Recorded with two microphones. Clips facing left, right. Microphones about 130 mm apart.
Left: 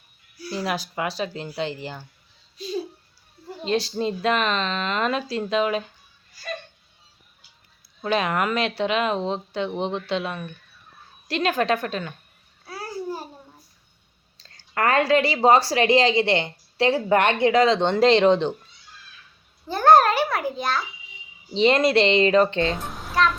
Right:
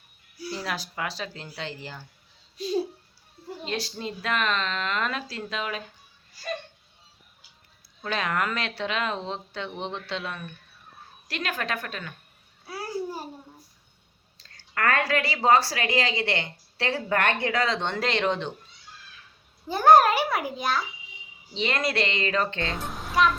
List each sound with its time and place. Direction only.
0.5 s speech: 15° left (ahead or behind)
3.6 s speech: 25° left (ahead or behind)
8.0 s speech: 20° left (ahead or behind)
12.6 s babbling: 5° right (ahead or behind)
14.4 s speech: 25° left (ahead or behind)
19.6 s a child's voice: 10° right (ahead or behind)
21.5 s speech: 25° left (ahead or behind)
22.8 s a sound: centre (ahead or behind)
23.1 s speech: 10° right (ahead or behind)